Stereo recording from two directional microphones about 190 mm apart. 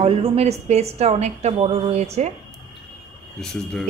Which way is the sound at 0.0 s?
30° right (ahead or behind).